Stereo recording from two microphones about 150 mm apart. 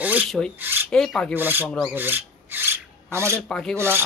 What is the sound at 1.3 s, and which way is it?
Speech, 15° right (ahead or behind).